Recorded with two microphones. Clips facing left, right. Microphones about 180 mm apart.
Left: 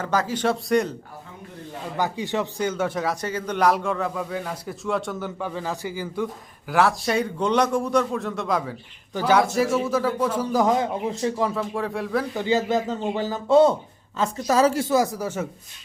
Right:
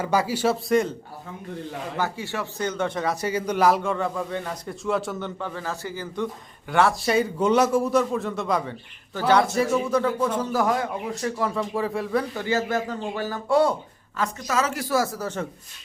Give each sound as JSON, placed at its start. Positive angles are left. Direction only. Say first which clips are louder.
{"t": 0.0, "sound": "a man's voice", "louder": "right 1 dB", "side_deg": -10}
{"t": 2.0, "sound": "speech", "louder": "left 4 dB", "side_deg": 15}
{"t": 2.6, "sound": "a man's voice", "louder": "left 1 dB", "side_deg": 5}
{"t": 3.2, "sound": "a man's voice", "louder": "right 1 dB", "side_deg": -10}
{"t": 5.4, "sound": "a man's voice", "louder": "left 2 dB", "side_deg": 15}
{"t": 11.5, "sound": "a man's voice", "louder": "right 1 dB", "side_deg": 0}
{"t": 12.3, "sound": "speech", "louder": "left 3 dB", "side_deg": 15}
{"t": 14.2, "sound": "a woman's voice", "louder": "left 5 dB", "side_deg": 35}
{"t": 14.8, "sound": "speech", "louder": "left 3 dB", "side_deg": 15}